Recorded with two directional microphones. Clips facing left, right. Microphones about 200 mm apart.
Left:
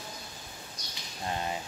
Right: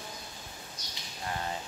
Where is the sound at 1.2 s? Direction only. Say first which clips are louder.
Left 2 dB; 20° left (ahead or behind).